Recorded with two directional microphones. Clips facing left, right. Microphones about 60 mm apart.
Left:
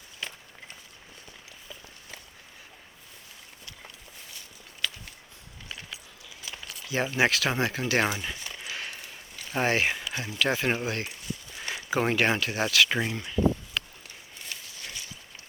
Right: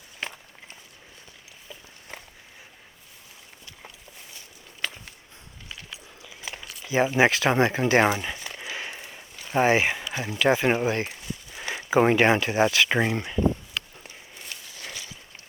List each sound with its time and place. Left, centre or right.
4.8 s walk: right
6.8 s speech: centre
8.6 s a sound: centre
9.6 s speech: centre; by 13.3 s right